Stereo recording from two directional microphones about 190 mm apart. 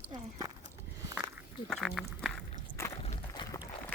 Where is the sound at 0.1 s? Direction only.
20° right (ahead or behind).